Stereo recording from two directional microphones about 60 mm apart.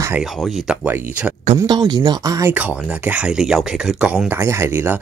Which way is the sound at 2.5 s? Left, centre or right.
Right.